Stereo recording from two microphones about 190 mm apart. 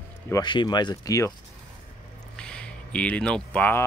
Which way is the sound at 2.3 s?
5° left (ahead or behind).